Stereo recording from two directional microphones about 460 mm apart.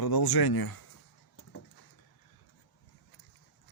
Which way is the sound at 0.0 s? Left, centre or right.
Left.